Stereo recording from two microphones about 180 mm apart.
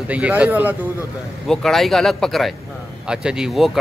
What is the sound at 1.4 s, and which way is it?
Speech, centre (ahead or behind).